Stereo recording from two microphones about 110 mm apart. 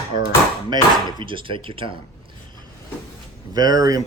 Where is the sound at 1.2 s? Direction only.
50° right (ahead or behind).